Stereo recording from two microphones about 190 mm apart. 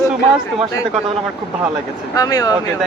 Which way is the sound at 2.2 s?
20° left (ahead or behind).